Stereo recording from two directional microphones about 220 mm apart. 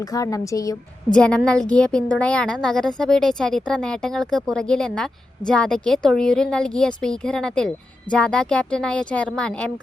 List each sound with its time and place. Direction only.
0.0 s a woman's voice: 15° left (ahead or behind)
1.1 s a woman's voice: 5° left (ahead or behind)